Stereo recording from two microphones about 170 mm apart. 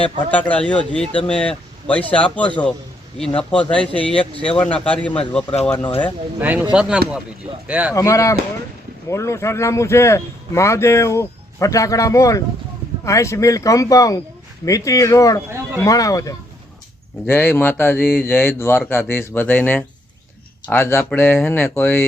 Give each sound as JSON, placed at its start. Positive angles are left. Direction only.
{"t": 0.3, "sound": "a man's voice", "side_deg": 10}
{"t": 6.4, "sound": "speech", "side_deg": -10}
{"t": 7.9, "sound": "a man's voice", "side_deg": 20}
{"t": 15.4, "sound": "a sound", "side_deg": -15}
{"t": 15.8, "sound": "a man's voice", "side_deg": 20}